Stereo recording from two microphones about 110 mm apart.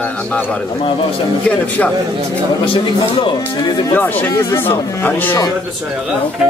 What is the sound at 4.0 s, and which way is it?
Speech, 15° left (ahead or behind).